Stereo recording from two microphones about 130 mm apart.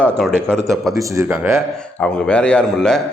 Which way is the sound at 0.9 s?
20° right (ahead or behind).